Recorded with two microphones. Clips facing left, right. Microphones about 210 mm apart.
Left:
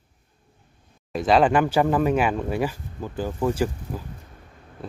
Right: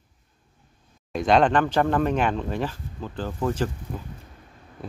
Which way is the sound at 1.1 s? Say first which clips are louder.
Left 1 dB; centre (ahead or behind).